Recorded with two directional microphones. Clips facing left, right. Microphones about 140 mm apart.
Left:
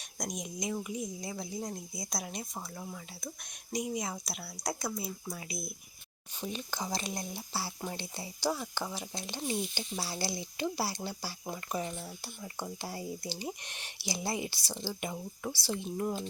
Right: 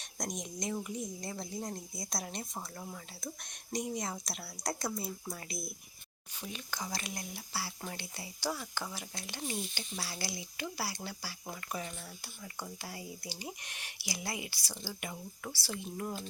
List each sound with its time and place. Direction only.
0.0 s a woman's voice: centre (ahead or behind)
6.4 s speech: 25° left (ahead or behind)